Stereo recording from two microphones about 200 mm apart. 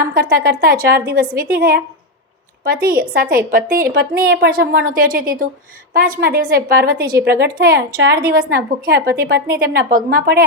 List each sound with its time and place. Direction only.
0.0 s a woman's voice: 45° right (ahead or behind)
2.8 s a woman's voice: 45° right (ahead or behind)
6.9 s a woman's voice: 10° right (ahead or behind)
7.3 s a woman's voice: 50° right (ahead or behind)